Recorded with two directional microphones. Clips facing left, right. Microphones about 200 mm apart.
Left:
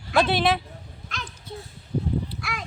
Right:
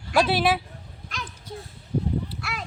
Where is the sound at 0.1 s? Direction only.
5° right (ahead or behind).